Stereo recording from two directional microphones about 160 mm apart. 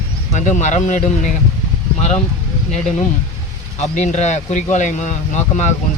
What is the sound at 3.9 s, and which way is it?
Speech, 50° left (ahead or behind).